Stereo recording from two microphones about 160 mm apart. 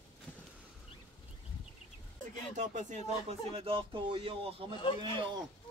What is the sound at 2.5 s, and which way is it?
Speech, 50° right (ahead or behind).